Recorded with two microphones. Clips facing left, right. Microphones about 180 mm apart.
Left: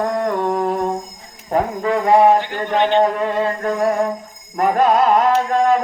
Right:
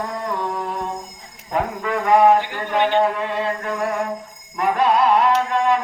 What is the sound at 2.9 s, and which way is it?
Music, 45° left (ahead or behind).